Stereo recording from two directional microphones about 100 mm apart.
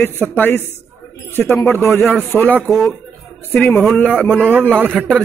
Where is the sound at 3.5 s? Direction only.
15° left (ahead or behind).